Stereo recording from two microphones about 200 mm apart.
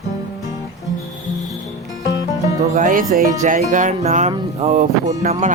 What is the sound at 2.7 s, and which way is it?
Speech, 40° right (ahead or behind).